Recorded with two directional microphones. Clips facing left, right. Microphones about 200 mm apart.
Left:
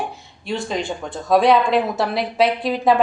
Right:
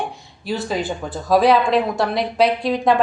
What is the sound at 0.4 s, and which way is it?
Speech, 5° right (ahead or behind).